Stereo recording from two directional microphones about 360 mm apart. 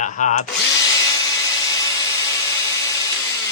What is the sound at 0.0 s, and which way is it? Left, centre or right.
Drill, left.